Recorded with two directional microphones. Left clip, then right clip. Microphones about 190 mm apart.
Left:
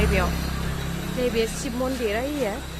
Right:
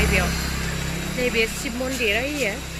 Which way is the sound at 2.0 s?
5° left (ahead or behind).